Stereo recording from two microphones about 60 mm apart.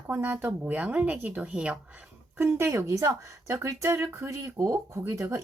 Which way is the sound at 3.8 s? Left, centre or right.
Right.